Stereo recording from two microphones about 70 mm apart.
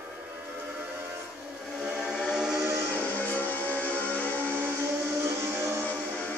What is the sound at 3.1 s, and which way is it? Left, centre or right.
Music, left.